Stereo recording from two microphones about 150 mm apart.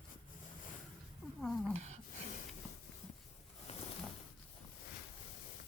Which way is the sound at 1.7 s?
50° right (ahead or behind).